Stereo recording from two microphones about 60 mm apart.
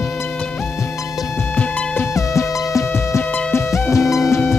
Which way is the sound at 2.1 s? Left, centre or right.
Left.